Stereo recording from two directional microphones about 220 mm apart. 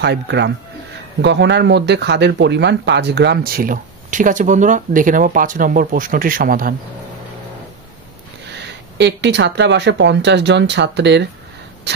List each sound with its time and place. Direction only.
0.0 s speech: 50° right (ahead or behind)
8.5 s speech: 50° right (ahead or behind)